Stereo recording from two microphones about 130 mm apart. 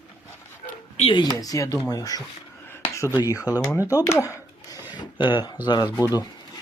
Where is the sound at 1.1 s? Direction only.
30° left (ahead or behind).